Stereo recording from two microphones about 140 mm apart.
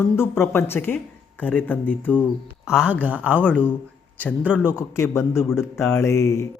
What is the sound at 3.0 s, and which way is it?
Speech, 10° right (ahead or behind).